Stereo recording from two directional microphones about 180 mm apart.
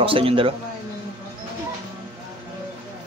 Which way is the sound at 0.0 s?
30° right (ahead or behind).